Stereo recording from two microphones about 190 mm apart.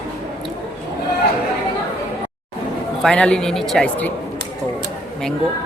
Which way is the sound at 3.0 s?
5° left (ahead or behind).